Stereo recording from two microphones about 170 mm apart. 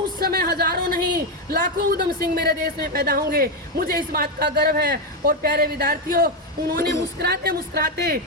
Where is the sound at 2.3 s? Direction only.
70° right (ahead or behind).